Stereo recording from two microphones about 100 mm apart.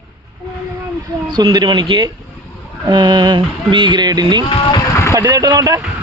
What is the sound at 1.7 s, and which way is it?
Speech, 55° right (ahead or behind).